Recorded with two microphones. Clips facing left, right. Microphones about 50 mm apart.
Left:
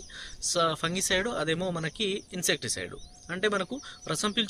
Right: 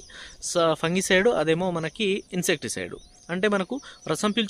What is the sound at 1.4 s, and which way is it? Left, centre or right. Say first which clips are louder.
Speech: right 6 dB; right.